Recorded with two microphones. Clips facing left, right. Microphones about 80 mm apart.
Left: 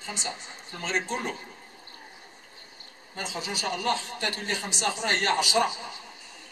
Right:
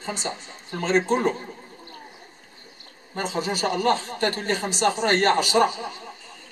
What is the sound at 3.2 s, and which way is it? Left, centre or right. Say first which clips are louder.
A man's voice: right 8 dB; right.